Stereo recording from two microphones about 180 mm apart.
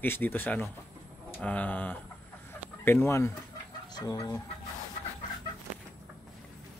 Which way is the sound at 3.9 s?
20° left (ahead or behind).